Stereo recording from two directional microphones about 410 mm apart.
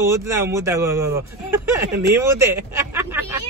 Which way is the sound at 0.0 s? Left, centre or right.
Centre.